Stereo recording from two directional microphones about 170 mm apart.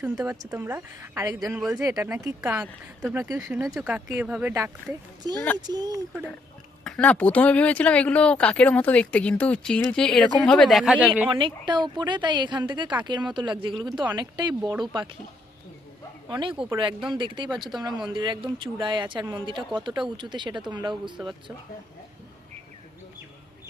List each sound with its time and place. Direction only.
0.2 s speech: 15° right (ahead or behind)
1.5 s speech: centre (ahead or behind)
1.7 s speech: 20° right (ahead or behind)
3.2 s speech: 15° right (ahead or behind)
3.8 s speech: 5° right (ahead or behind)
5.2 s speech: 25° right (ahead or behind)
6.8 s speech: 5° left (ahead or behind)
11.3 s speech: 30° right (ahead or behind)
16.3 s speech: 30° right (ahead or behind)